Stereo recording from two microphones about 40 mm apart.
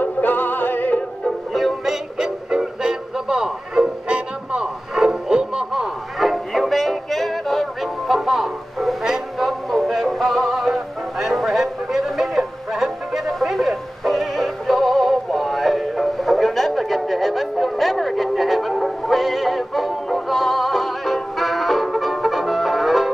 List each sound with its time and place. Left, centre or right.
0.0 s music: left
1.2 s music: centre
3.8 s music: right
4.9 s music: centre
6.1 s music: centre
13.5 s synthetic singing: centre